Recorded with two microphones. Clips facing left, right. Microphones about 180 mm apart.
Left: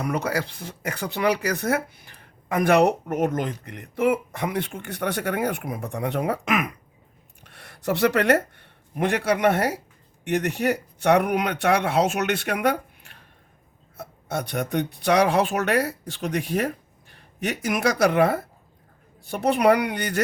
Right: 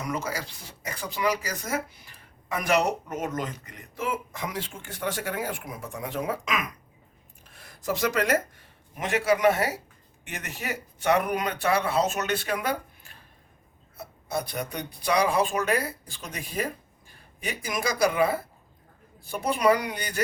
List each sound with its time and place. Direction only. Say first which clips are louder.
0.0 s speech: left 6 dB; 65° left (ahead or behind)
7.4 s speech: left 4 dB; 70° left (ahead or behind)
14.3 s speech: left 4 dB; 70° left (ahead or behind)